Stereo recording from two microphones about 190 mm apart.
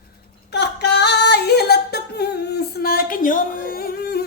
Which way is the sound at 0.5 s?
65° left (ahead or behind).